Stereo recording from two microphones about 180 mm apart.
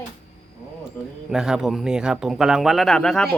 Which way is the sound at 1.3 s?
5° right (ahead or behind).